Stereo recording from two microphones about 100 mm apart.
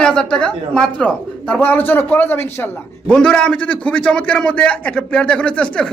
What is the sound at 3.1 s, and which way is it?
A man's voice, 10° left (ahead or behind).